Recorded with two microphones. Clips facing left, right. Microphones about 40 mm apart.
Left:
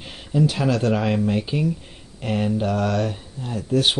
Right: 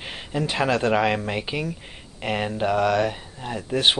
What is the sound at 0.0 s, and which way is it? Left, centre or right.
Speech, right.